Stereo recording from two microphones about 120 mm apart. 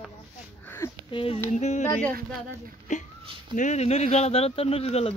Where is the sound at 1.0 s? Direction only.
50° left (ahead or behind).